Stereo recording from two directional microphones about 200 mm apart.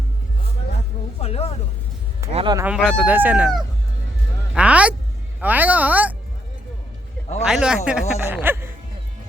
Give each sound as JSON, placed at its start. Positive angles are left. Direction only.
{"t": 1.2, "sound": "a sound", "side_deg": 30}
{"t": 2.3, "sound": "speech", "side_deg": -25}
{"t": 2.6, "sound": "speech", "side_deg": -5}
{"t": 7.4, "sound": "speech", "side_deg": -5}